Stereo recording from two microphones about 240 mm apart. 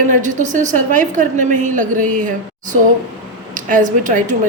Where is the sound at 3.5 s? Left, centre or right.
Right.